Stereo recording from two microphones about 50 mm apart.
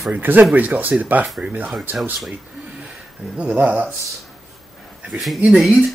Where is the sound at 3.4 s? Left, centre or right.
Right.